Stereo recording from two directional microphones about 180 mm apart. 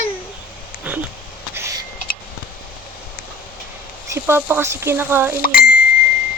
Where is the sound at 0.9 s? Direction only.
5° right (ahead or behind).